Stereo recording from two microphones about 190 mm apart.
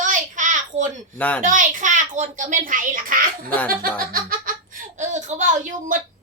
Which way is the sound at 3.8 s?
50° right (ahead or behind).